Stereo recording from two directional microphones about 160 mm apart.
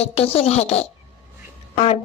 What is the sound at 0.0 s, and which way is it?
Speech, 40° left (ahead or behind).